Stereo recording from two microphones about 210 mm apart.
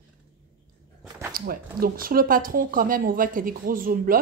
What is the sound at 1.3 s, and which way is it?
Speech, 45° right (ahead or behind).